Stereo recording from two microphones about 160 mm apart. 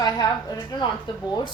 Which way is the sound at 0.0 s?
25° left (ahead or behind).